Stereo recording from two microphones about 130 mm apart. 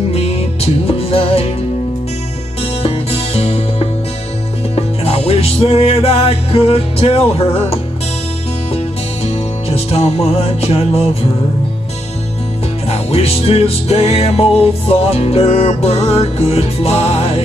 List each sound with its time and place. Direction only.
0.1 s music: 50° left (ahead or behind)
2.8 s music: 50° left (ahead or behind)
9.7 s music: 50° left (ahead or behind)
12.8 s music: 50° left (ahead or behind)